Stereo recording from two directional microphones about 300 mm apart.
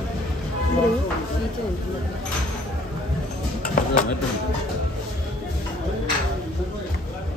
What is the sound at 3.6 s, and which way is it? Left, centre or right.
Music, left.